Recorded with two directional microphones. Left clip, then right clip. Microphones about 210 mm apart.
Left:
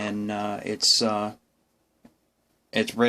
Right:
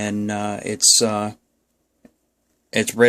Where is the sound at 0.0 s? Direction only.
40° right (ahead or behind).